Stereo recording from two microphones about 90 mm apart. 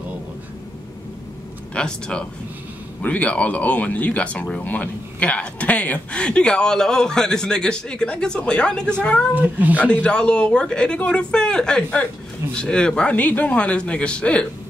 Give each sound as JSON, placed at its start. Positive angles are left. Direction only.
{"t": 1.7, "sound": "speech", "side_deg": 10}
{"t": 9.3, "sound": "speech", "side_deg": -20}
{"t": 10.0, "sound": "speech", "side_deg": 10}